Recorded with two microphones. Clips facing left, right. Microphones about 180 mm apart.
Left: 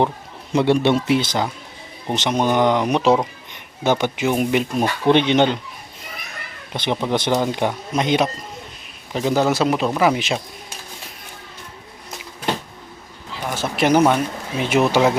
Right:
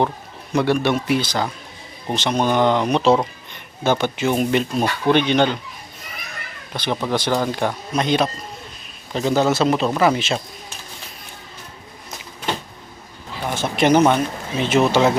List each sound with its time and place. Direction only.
0.5 s speech: 25° left (ahead or behind)
6.7 s speech: 20° left (ahead or behind)
13.6 s speech: 5° left (ahead or behind)